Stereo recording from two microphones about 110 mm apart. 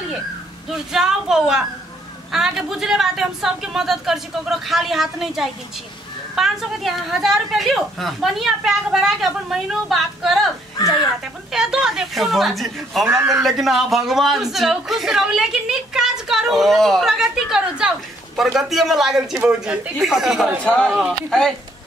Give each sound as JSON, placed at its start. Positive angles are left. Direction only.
{"t": 0.7, "sound": "speech", "side_deg": -5}
{"t": 11.5, "sound": "speech", "side_deg": -5}
{"t": 13.0, "sound": "a man's voice", "side_deg": -20}
{"t": 13.3, "sound": "speech", "side_deg": 0}
{"t": 20.6, "sound": "speech", "side_deg": 10}